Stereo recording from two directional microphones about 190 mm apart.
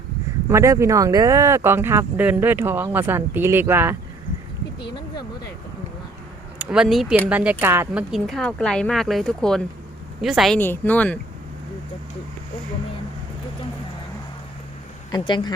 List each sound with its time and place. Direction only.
0.5 s speech: 15° right (ahead or behind)
6.6 s speech: 5° right (ahead or behind)
8.1 s speech: centre (ahead or behind)
10.6 s speech: 10° left (ahead or behind)
15.1 s speech: 25° left (ahead or behind)